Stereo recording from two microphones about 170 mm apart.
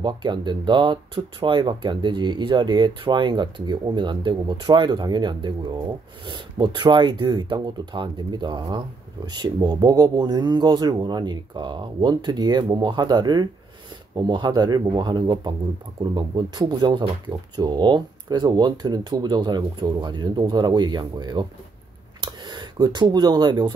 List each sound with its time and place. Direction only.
0.0 s speech: 25° right (ahead or behind)